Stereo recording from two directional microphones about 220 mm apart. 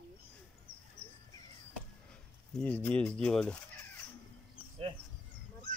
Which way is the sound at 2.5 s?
5° left (ahead or behind).